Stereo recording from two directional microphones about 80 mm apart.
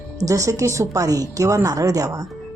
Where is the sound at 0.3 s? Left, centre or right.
Right.